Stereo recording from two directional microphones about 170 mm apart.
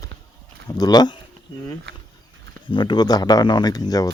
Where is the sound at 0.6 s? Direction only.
20° left (ahead or behind).